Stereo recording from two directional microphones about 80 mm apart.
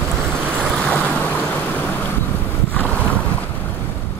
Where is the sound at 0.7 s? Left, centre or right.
Centre.